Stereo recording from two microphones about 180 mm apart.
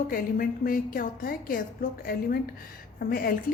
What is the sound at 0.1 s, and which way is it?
A woman's voice, 50° left (ahead or behind).